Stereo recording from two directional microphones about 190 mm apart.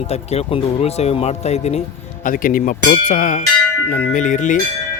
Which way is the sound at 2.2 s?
45° left (ahead or behind).